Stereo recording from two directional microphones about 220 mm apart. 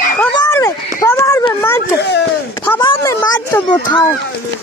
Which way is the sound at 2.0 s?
50° left (ahead or behind).